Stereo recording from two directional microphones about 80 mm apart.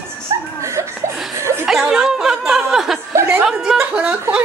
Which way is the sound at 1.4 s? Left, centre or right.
Right.